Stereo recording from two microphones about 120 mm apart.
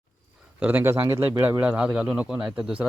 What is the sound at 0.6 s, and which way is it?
Speech, 15° right (ahead or behind).